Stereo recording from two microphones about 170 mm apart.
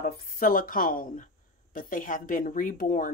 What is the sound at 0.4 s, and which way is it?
A woman's voice, 55° left (ahead or behind).